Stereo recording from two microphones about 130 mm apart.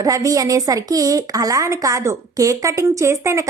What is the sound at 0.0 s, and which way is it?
A woman's voice, 25° right (ahead or behind).